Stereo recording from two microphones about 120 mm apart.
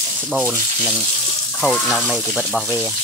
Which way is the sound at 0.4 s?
15° right (ahead or behind).